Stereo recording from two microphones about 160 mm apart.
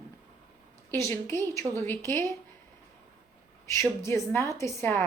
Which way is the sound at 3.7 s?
15° left (ahead or behind).